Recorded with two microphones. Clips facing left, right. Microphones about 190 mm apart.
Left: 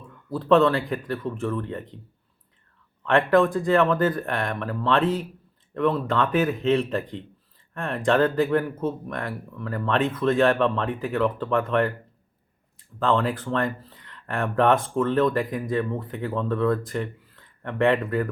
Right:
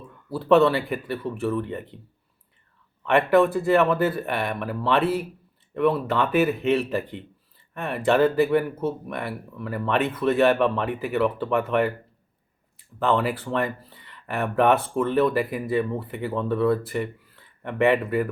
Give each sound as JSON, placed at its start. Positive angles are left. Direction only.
{"t": 0.3, "sound": "speech", "side_deg": -5}
{"t": 3.0, "sound": "speech", "side_deg": -5}
{"t": 13.0, "sound": "speech", "side_deg": -5}